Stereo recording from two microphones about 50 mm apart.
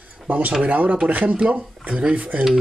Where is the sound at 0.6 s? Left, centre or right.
Right.